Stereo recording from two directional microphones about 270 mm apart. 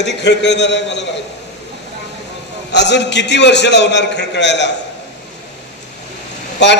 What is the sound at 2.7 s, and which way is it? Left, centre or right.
A man's voice, left.